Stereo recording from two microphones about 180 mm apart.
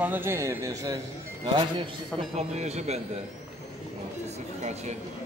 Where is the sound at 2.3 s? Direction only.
35° right (ahead or behind).